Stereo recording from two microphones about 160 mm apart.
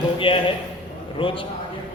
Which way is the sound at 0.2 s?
30° left (ahead or behind).